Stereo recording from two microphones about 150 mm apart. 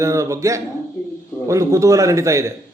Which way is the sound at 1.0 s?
20° left (ahead or behind).